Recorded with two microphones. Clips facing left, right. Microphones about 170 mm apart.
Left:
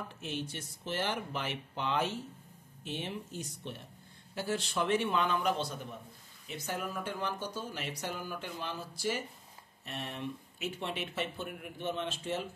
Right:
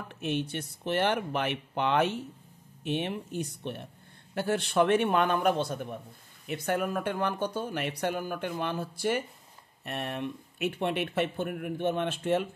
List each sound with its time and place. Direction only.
0.2 s speech: 65° right (ahead or behind)